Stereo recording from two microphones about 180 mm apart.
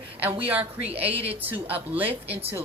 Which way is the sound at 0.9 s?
35° right (ahead or behind).